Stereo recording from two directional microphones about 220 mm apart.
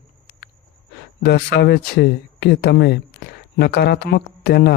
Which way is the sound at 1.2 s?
50° left (ahead or behind).